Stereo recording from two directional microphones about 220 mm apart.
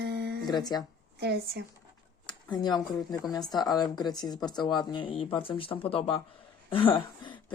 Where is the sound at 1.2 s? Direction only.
45° right (ahead or behind).